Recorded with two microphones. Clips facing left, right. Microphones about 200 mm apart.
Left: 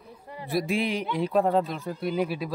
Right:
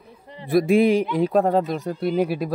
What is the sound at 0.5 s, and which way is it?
Speech, 50° right (ahead or behind).